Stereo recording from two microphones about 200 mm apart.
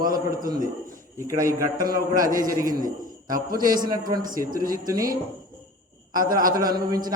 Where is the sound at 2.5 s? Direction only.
15° right (ahead or behind).